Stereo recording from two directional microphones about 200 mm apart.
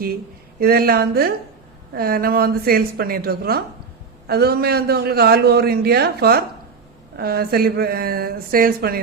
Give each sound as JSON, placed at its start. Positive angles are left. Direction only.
{"t": 0.6, "sound": "a man's voice", "side_deg": -50}